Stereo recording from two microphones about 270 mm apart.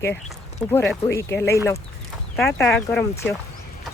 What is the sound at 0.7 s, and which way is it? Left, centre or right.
Speech, centre.